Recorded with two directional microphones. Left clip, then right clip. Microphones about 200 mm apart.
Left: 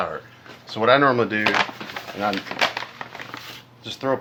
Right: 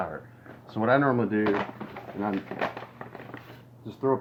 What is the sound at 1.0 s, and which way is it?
Speech, 45° left (ahead or behind).